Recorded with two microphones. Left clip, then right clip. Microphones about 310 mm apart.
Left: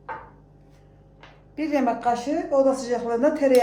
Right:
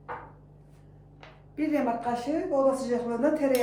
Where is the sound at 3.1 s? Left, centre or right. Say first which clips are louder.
Left 6 dB; left.